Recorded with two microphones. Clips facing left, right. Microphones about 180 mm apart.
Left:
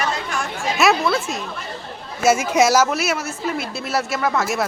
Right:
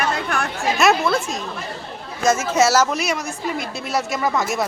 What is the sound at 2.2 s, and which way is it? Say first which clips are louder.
Speech: left 1 dB; 10° left (ahead or behind).